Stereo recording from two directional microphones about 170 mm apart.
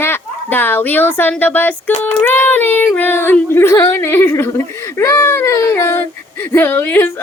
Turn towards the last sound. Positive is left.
turn(degrees=10)  # may be behind; listen again after turning